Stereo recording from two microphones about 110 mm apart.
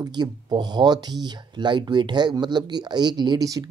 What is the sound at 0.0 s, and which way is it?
Speech, 40° right (ahead or behind).